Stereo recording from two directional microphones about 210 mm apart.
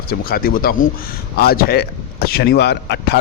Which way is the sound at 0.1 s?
45° left (ahead or behind).